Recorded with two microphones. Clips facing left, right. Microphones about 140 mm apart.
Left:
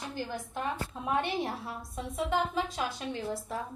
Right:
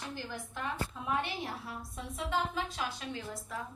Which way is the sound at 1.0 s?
35° left (ahead or behind).